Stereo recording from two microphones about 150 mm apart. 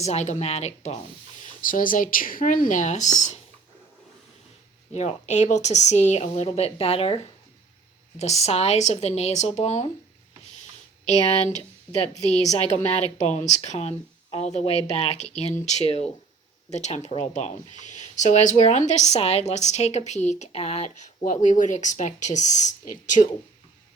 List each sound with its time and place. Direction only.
0.0 s speech: 50° left (ahead or behind)
1.6 s speech: 65° left (ahead or behind)
4.9 s speech: 50° left (ahead or behind)
8.2 s speech: 45° left (ahead or behind)
11.0 s speech: 45° left (ahead or behind)